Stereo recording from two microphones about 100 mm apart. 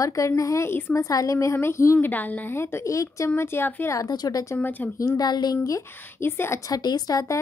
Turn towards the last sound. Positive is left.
turn(degrees=35)  # may be behind; listen again after turning